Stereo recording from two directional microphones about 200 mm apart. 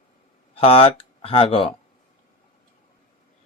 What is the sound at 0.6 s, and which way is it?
Speech, 30° left (ahead or behind).